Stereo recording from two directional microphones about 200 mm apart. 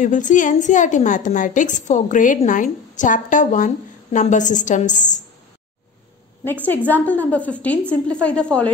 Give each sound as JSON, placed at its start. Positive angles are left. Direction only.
{"t": 0.0, "sound": "a woman's voice", "side_deg": 40}
{"t": 6.4, "sound": "a woman's voice", "side_deg": 10}